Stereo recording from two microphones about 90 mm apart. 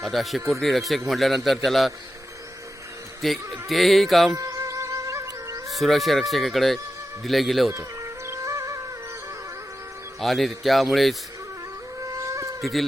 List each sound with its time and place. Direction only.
0.0 s a man's voice: centre (ahead or behind)
3.2 s a man's voice: centre (ahead or behind)
4.4 s music: 40° right (ahead or behind)
5.6 s a man's voice: centre (ahead or behind)
8.3 s music: 35° right (ahead or behind)
10.2 s a man's voice: centre (ahead or behind)
12.2 s insect: 35° right (ahead or behind)